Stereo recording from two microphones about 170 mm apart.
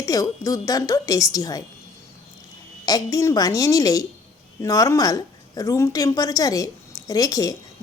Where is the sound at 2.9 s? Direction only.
20° left (ahead or behind).